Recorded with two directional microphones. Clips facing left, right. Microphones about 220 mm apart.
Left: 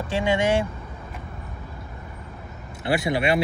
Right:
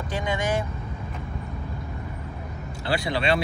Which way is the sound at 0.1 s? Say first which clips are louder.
Left 5 dB; 25° left (ahead or behind).